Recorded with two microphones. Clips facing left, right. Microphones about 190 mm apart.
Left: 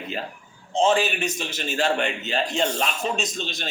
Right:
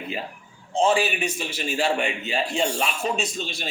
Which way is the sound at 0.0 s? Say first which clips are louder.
Even; 10° right (ahead or behind).